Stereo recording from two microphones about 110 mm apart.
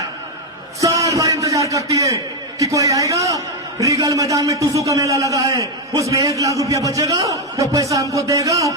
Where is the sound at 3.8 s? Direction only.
30° right (ahead or behind).